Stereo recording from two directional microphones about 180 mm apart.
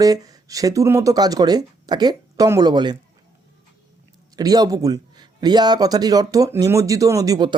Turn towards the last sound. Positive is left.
turn(degrees=-20)  # may be behind; listen again after turning